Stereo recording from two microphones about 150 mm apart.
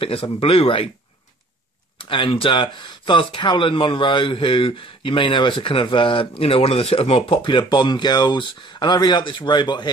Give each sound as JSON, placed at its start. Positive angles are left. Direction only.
{"t": 0.0, "sound": "speech", "side_deg": 40}
{"t": 2.0, "sound": "speech", "side_deg": 35}